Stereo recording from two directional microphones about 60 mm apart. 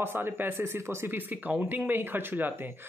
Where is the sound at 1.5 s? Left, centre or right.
Right.